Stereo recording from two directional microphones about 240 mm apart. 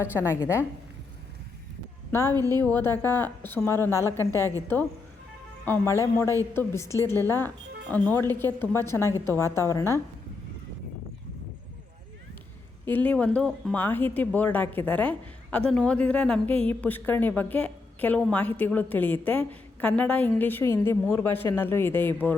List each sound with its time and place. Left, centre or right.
0.0 s speech: centre
2.3 s a woman's voice: centre
2.6 s speech: centre
5.6 s speech: centre
12.8 s speech: centre